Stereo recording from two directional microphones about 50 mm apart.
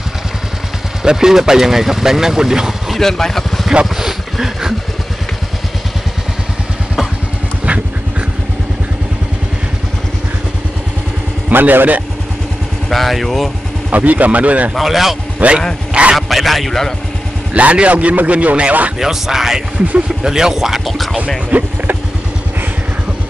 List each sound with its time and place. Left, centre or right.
1.0 s speech: centre
3.0 s speech: centre
3.8 s a sound: centre
11.5 s speech: right
12.9 s a man's voice: centre
13.8 s a man's voice: right
14.8 s a man's voice: centre
15.3 s speech: right
16.2 s a man's voice: centre
17.6 s a man's voice: right
18.9 s speech: centre
21.5 s a sound: right